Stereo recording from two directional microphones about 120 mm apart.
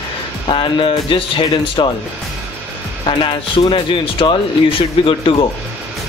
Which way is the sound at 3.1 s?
45° left (ahead or behind).